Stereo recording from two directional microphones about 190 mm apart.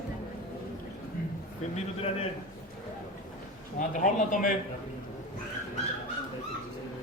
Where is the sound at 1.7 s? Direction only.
30° left (ahead or behind).